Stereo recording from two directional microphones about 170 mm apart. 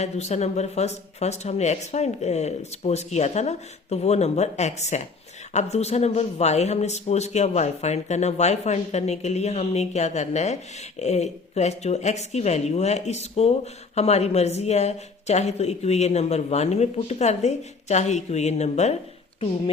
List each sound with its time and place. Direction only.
0.0 s speech: 40° left (ahead or behind)